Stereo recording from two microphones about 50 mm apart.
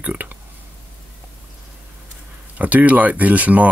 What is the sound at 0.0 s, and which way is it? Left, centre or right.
Speech, right.